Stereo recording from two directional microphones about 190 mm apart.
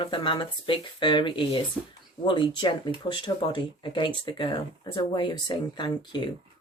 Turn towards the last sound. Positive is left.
turn(degrees=25)  # may be behind; listen again after turning